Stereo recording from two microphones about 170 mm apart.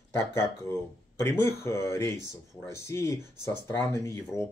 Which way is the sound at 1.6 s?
15° left (ahead or behind).